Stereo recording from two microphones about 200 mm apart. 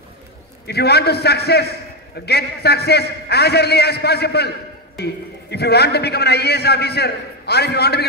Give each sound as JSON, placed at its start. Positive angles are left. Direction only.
{"t": 0.7, "sound": "a man's voice", "side_deg": 55}